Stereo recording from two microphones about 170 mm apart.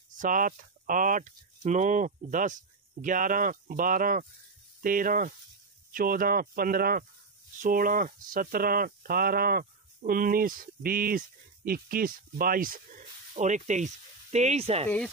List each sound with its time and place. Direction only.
0.1 s speech: 50° right (ahead or behind)
13.4 s speech: 45° right (ahead or behind)